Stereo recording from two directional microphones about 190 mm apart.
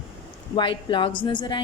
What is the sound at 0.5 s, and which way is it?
A woman's voice, 25° left (ahead or behind).